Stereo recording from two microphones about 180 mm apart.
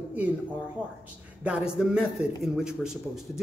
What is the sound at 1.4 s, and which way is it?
Speech, 5° right (ahead or behind).